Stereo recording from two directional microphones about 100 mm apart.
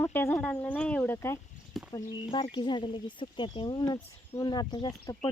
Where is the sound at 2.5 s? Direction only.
50° left (ahead or behind).